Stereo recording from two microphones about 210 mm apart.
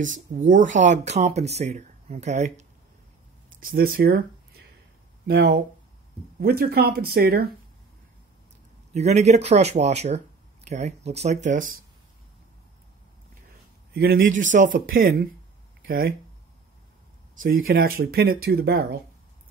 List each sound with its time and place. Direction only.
0.5 s speech: 40° right (ahead or behind)
3.6 s speech: 45° right (ahead or behind)
8.9 s speech: 30° right (ahead or behind)
13.9 s speech: 45° right (ahead or behind)
17.4 s speech: 45° right (ahead or behind)